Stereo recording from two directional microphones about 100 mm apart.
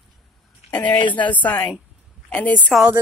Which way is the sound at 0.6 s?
15° left (ahead or behind).